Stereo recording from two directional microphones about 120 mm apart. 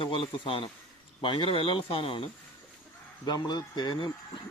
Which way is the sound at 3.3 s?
35° left (ahead or behind).